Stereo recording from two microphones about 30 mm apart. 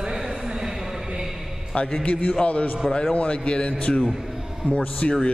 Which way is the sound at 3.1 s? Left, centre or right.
Left.